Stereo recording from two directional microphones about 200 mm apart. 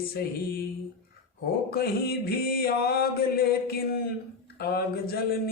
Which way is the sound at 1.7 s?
50° left (ahead or behind).